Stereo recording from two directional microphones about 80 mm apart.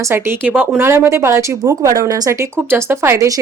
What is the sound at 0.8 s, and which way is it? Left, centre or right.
Speech, right.